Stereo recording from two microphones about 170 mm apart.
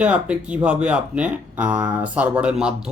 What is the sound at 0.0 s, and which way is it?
Speech, 5° right (ahead or behind).